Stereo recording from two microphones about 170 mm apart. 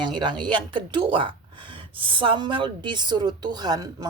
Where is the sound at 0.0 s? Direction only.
25° right (ahead or behind).